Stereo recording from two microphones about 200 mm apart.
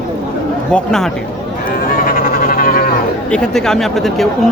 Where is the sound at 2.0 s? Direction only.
45° left (ahead or behind).